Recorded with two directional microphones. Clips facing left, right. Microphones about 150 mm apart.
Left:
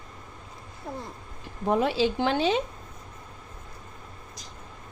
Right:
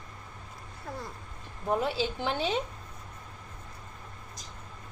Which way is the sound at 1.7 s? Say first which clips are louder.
Left 5 dB; 90° left.